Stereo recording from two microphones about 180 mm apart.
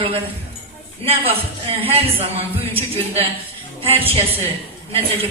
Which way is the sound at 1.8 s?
30° right (ahead or behind).